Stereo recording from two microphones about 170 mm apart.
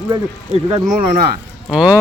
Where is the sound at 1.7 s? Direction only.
5° right (ahead or behind).